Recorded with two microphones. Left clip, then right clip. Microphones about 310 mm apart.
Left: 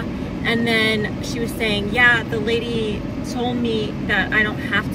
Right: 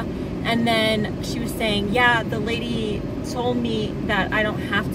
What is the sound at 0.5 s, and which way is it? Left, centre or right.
Speech, centre.